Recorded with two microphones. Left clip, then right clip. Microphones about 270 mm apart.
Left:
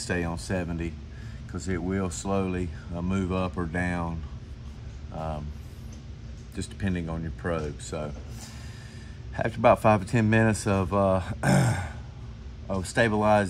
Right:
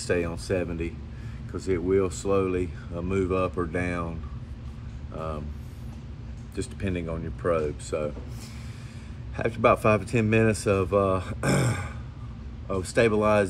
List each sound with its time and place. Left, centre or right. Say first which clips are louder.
0.0 s speech: right 3 dB; left
6.5 s speech: right 2 dB; left
9.4 s speech: left 1 dB; left